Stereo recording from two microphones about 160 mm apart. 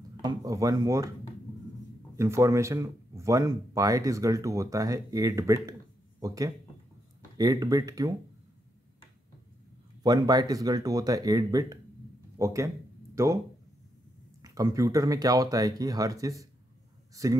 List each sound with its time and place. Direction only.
0.2 s speech: 20° right (ahead or behind)
2.1 s speech: 15° right (ahead or behind)
10.0 s speech: 25° right (ahead or behind)
14.4 s speech: 20° right (ahead or behind)